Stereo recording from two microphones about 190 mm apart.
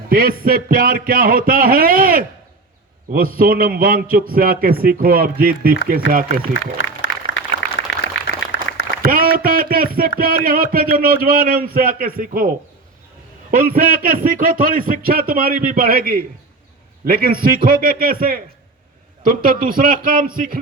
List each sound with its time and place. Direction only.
0.1 s speech: 50° right (ahead or behind)
6.5 s applause: 75° left (ahead or behind)
8.4 s applause: 85° left
9.0 s a sound: 50° right (ahead or behind)
10.2 s speech: 50° right (ahead or behind)
13.5 s speech: 50° right (ahead or behind)